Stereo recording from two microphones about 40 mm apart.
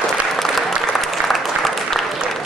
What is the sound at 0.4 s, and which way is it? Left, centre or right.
Applause, centre.